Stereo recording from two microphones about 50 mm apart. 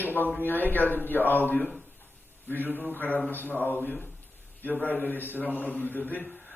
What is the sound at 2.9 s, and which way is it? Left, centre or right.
A man's voice, left.